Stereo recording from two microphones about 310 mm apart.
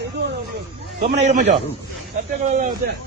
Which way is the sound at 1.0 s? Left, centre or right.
Right.